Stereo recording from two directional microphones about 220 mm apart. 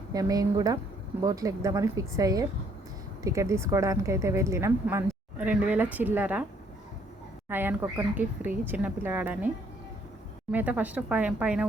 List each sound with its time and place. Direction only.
0.1 s speech: 15° right (ahead or behind)
7.5 s speech: 10° right (ahead or behind)
10.5 s speech: 5° right (ahead or behind)